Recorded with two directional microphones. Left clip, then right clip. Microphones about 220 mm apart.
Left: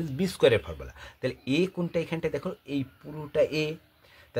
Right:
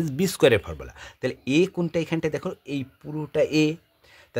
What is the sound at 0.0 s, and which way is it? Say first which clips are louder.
Speech: right 3 dB; 50° right (ahead or behind).